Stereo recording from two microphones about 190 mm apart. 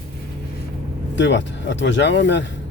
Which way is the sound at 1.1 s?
70° left (ahead or behind).